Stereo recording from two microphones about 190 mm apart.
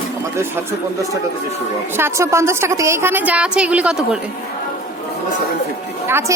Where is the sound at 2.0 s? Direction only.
15° right (ahead or behind).